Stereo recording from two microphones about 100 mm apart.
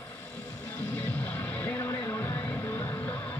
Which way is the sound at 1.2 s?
20° left (ahead or behind).